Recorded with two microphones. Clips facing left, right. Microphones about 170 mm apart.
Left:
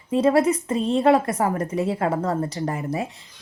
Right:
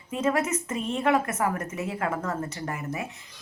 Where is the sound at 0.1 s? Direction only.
35° left (ahead or behind).